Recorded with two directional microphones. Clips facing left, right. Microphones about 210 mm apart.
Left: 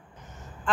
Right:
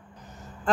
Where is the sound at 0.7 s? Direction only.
40° right (ahead or behind).